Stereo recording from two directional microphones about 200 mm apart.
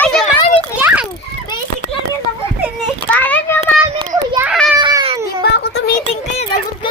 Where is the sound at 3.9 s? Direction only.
25° right (ahead or behind).